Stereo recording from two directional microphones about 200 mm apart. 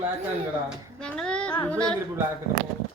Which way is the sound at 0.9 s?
5° left (ahead or behind).